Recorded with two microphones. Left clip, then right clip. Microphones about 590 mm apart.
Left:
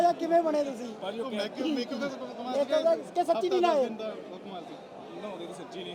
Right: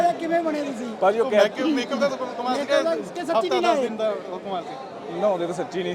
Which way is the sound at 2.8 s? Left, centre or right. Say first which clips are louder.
Right 1 dB; left.